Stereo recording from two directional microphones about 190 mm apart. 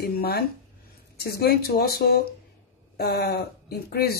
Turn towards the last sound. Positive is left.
turn(degrees=55)  # may be behind; listen again after turning